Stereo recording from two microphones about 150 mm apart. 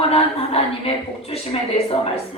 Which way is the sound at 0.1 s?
40° left (ahead or behind).